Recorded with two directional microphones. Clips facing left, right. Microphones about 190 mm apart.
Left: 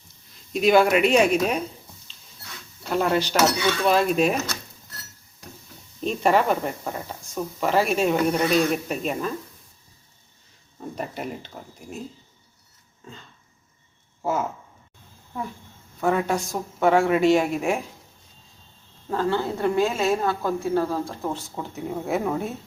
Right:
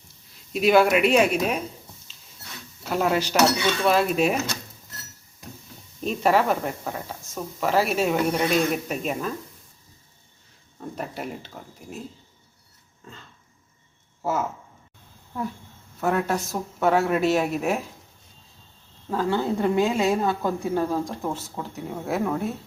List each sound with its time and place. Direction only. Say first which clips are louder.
0.5 s speech: even; 5° right (ahead or behind)
2.9 s speech: left 1 dB; 5° right (ahead or behind)
6.0 s speech: left 1 dB; 5° right (ahead or behind)
10.8 s speech: left 1 dB; centre (ahead or behind)
14.2 s speech: left 1 dB; 5° right (ahead or behind)
16.0 s speech: left 1 dB; 5° right (ahead or behind)
19.1 s a woman's voice: even; 15° right (ahead or behind)
21.2 s speech: even; centre (ahead or behind)